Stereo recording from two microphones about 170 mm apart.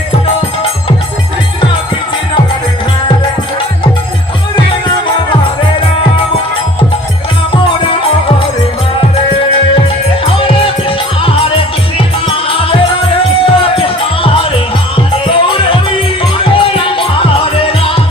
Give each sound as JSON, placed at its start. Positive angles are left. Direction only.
{"t": 10.2, "sound": "music", "side_deg": 30}
{"t": 12.5, "sound": "music", "side_deg": 30}